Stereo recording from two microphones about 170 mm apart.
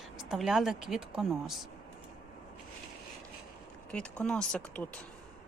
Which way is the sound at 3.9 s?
5° left (ahead or behind).